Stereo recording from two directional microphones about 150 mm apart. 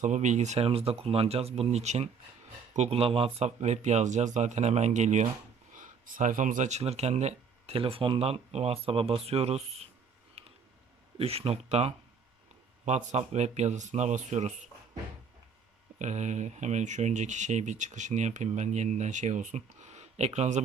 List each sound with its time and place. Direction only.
0.0 s speech: 55° right (ahead or behind)
5.7 s speech: 60° right (ahead or behind); by 9.9 s 45° right (ahead or behind)
10.4 s a sound: 40° right (ahead or behind)
11.2 s speech: 40° right (ahead or behind)
16.0 s speech: 50° right (ahead or behind)